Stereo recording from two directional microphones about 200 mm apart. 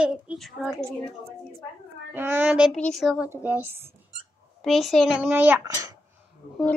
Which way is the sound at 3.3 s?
10° right (ahead or behind).